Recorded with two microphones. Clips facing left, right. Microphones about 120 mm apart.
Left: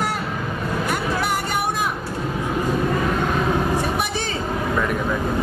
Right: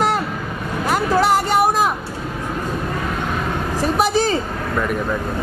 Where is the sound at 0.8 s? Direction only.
90° right.